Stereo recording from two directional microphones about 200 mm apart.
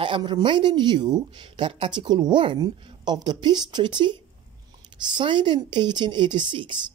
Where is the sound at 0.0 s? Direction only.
25° right (ahead or behind).